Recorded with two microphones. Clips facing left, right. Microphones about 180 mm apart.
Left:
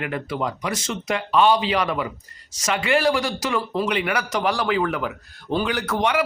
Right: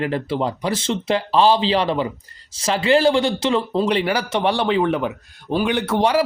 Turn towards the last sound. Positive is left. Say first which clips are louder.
# right 4 dB
turn(degrees=-30)  # may be behind; listen again after turning